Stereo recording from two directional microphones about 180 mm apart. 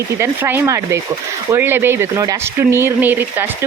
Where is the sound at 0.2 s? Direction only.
15° right (ahead or behind).